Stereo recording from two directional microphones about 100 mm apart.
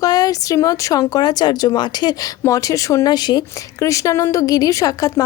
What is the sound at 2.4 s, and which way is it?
Speech, 35° left (ahead or behind).